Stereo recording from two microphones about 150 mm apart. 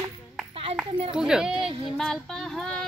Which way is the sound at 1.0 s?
5° right (ahead or behind).